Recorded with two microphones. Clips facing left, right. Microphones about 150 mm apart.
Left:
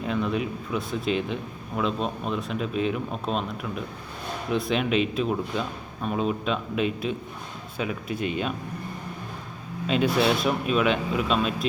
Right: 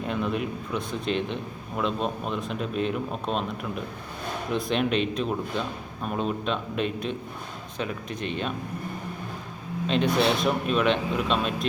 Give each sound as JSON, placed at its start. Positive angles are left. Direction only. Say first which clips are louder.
{"t": 0.1, "sound": "a man's voice", "louder": "left 2 dB", "side_deg": 0}
{"t": 9.8, "sound": "a man's voice", "louder": "left 1 dB", "side_deg": 5}